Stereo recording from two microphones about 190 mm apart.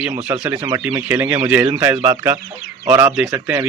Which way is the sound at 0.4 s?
15° right (ahead or behind).